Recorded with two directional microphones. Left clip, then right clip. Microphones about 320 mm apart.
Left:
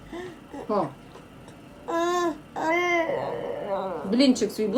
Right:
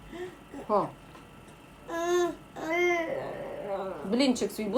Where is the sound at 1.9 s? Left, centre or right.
Centre.